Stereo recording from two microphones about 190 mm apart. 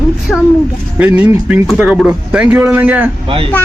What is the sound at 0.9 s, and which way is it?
Speech, 10° right (ahead or behind).